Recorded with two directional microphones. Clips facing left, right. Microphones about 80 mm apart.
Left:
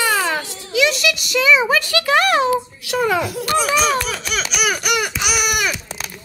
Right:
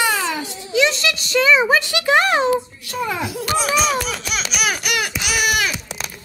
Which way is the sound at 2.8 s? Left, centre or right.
Left.